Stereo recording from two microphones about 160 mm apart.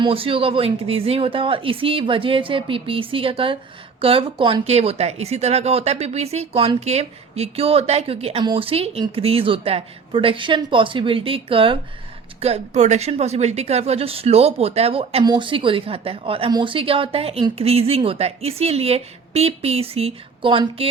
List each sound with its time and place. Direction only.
0.0 s speech: 35° right (ahead or behind)
15.2 s speech: 30° right (ahead or behind)